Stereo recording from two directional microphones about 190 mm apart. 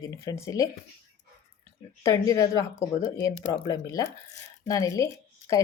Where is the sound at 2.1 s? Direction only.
20° left (ahead or behind).